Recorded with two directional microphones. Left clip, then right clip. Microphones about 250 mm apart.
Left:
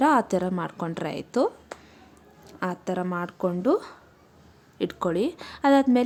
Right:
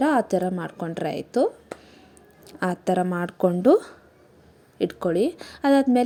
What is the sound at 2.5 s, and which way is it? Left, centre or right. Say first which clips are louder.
A woman's voice: right 5 dB; centre.